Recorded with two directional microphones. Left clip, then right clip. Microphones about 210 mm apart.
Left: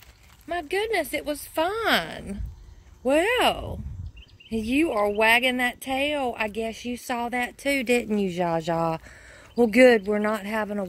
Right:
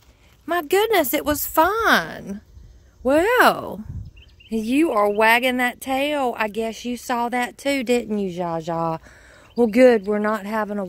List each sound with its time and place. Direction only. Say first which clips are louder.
0.5 s speech: right 7 dB; 45° right (ahead or behind); by 8.1 s 25° right (ahead or behind)
8.1 s speech: even; 10° right (ahead or behind); by 10.9 s 25° right (ahead or behind)